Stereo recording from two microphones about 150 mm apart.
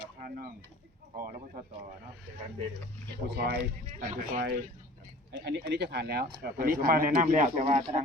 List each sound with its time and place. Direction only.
0.2 s speech: 75° right (ahead or behind)
3.3 s speech: 90° right
3.8 s speech: 55° right (ahead or behind)
5.4 s speech: 90° right; by 8.0 s 45° right (ahead or behind)